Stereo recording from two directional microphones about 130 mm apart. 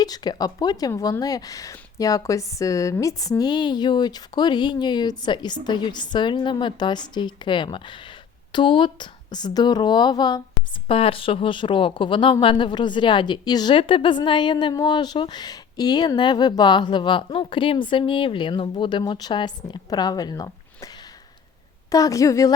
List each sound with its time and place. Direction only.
0.0 s speech: 30° left (ahead or behind)
10.8 s a woman's voice: 45° left (ahead or behind); by 22.5 s 25° left (ahead or behind)